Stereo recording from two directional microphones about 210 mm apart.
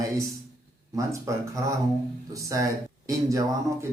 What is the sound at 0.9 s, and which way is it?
Speech, 15° right (ahead or behind).